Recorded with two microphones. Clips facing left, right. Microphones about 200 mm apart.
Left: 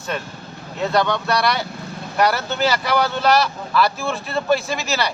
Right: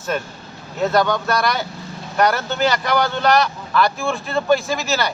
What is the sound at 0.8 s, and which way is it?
A man's voice, centre (ahead or behind).